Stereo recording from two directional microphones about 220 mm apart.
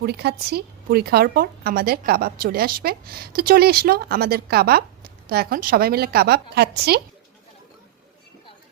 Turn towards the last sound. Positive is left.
turn(degrees=-45)  # may be behind; listen again after turning